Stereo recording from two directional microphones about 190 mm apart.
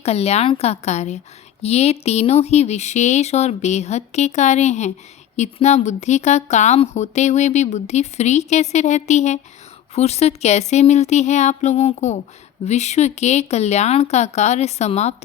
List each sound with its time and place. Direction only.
0.0 s a woman's voice: 35° left (ahead or behind)